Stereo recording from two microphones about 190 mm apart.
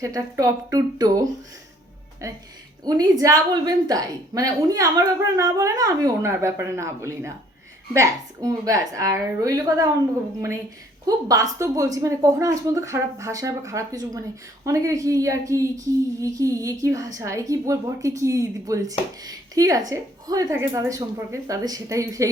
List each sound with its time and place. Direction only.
0.0 s a woman's voice: 15° right (ahead or behind)
11.0 s a woman's voice: 20° right (ahead or behind)